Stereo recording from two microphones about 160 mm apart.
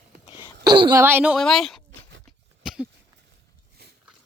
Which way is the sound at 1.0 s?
10° right (ahead or behind).